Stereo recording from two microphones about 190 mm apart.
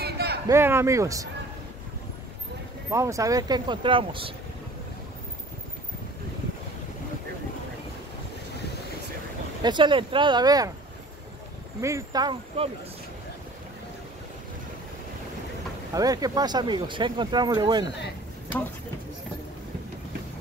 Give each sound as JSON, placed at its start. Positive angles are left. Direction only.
{"t": 0.0, "sound": "a sound", "side_deg": -55}
{"t": 0.5, "sound": "speech", "side_deg": -10}
{"t": 2.9, "sound": "speech", "side_deg": -15}
{"t": 9.6, "sound": "speech", "side_deg": -25}
{"t": 11.8, "sound": "speech", "side_deg": -20}
{"t": 15.9, "sound": "speech", "side_deg": -20}